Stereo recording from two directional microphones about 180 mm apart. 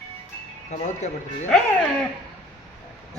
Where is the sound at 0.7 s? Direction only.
40° left (ahead or behind).